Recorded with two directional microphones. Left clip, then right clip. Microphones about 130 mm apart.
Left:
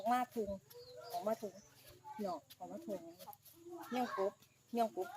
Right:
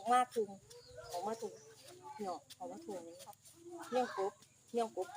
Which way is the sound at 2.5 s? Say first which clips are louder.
Right 2 dB; 50° right (ahead or behind).